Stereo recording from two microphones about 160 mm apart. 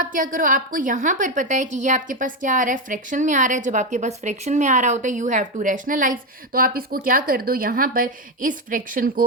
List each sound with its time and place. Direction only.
0.0 s a woman's voice: 60° right (ahead or behind)